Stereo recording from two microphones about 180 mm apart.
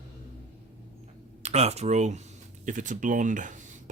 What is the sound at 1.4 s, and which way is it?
Speech, 35° right (ahead or behind).